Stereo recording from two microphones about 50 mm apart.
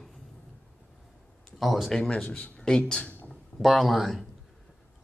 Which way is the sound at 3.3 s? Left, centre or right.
Centre.